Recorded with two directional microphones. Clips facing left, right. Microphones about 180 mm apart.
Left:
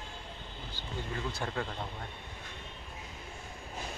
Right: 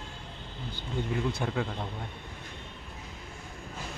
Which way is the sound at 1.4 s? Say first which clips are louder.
Right 4 dB; 5° right (ahead or behind).